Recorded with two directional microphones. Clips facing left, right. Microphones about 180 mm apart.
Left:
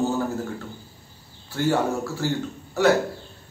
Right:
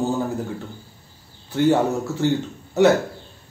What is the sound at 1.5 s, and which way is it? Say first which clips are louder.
Speech: right 4 dB; 20° right (ahead or behind).